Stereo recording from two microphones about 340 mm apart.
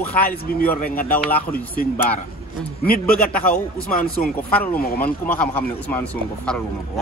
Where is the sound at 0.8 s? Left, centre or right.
Left.